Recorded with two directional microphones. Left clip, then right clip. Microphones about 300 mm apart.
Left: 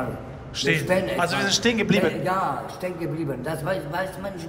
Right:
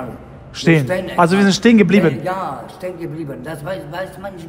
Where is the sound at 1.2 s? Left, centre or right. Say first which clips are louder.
Right 8 dB; right.